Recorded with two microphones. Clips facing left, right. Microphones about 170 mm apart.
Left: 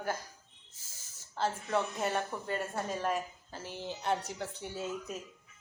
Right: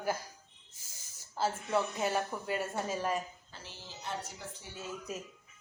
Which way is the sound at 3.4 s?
45° left (ahead or behind).